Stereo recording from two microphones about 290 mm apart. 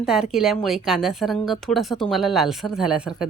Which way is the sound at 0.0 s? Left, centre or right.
Centre.